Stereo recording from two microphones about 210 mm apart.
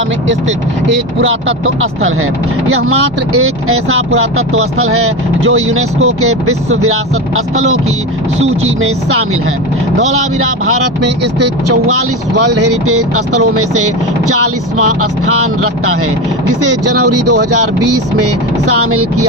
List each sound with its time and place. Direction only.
1.2 s speech: 70° right (ahead or behind)
3.3 s speech: 90° right
10.1 s speech: 90° right
16.6 s speech: 90° right